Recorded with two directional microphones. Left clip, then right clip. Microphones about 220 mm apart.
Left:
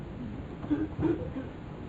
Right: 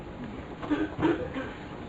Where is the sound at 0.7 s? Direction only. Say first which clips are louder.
Right 3 dB; 20° right (ahead or behind).